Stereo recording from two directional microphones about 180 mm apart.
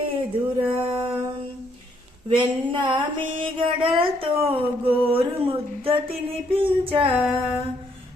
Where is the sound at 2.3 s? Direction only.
25° right (ahead or behind).